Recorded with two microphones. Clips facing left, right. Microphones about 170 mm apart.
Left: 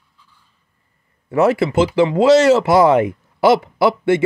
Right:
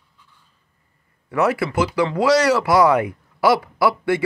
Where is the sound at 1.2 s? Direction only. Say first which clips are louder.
Left 5 dB; 25° left (ahead or behind).